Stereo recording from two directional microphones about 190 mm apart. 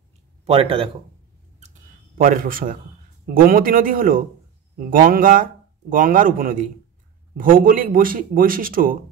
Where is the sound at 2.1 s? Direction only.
45° right (ahead or behind).